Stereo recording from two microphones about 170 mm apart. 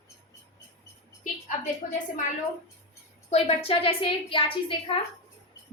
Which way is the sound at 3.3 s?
35° left (ahead or behind).